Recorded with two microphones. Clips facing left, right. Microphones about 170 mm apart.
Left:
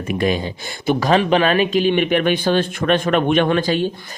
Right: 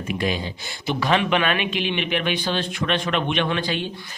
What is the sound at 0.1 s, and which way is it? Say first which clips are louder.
Speech: left 6 dB; 50° left (ahead or behind).